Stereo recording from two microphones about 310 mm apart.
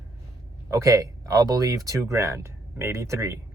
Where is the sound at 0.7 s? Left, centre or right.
Centre.